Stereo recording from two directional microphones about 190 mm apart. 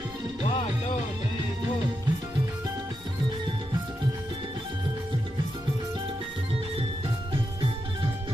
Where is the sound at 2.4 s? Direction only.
20° right (ahead or behind).